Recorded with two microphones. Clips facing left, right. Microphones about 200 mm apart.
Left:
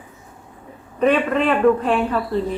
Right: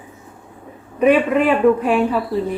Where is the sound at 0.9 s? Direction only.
10° right (ahead or behind).